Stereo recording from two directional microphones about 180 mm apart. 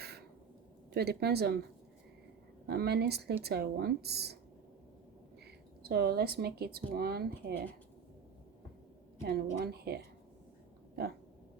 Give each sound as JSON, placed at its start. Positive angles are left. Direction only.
{"t": 0.9, "sound": "speech", "side_deg": -65}
{"t": 2.6, "sound": "speech", "side_deg": -65}
{"t": 5.5, "sound": "speech", "side_deg": -65}
{"t": 9.2, "sound": "speech", "side_deg": -60}